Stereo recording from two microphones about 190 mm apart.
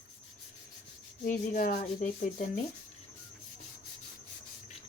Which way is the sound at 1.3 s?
45° left (ahead or behind).